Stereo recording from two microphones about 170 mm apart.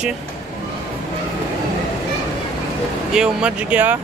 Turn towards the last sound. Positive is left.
turn(degrees=-10)  # may be behind; listen again after turning